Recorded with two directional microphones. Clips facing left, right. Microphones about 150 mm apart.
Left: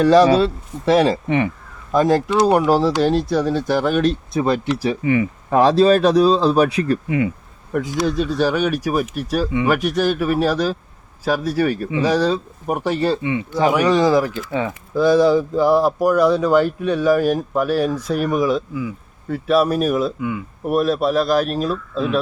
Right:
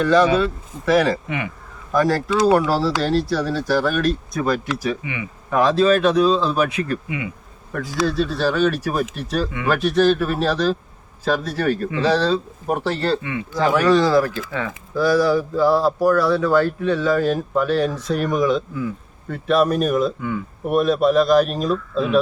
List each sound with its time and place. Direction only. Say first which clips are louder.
0.0 s speech: left 4 dB; 35° left (ahead or behind)
8.0 s speech: even; 15° left (ahead or behind); by 22.2 s centre (ahead or behind)